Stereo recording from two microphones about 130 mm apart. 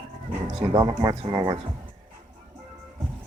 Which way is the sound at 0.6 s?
35° right (ahead or behind).